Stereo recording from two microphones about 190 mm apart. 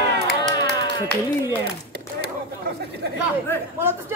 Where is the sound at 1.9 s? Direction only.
60° right (ahead or behind).